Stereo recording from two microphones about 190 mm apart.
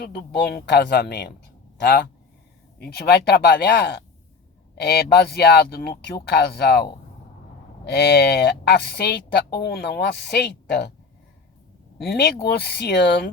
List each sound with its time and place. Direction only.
0.0 s speech: 50° left (ahead or behind)
11.9 s speech: 60° left (ahead or behind)